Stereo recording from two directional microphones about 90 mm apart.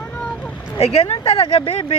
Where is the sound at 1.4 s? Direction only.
75° left (ahead or behind).